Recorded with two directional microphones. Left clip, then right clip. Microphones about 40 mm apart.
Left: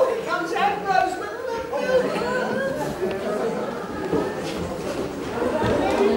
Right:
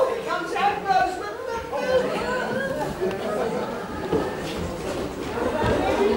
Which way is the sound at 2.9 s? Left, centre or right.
Centre.